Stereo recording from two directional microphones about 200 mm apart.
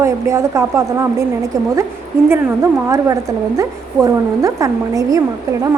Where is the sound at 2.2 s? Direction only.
15° right (ahead or behind).